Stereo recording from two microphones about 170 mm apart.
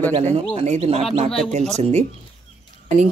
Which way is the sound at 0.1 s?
40° right (ahead or behind).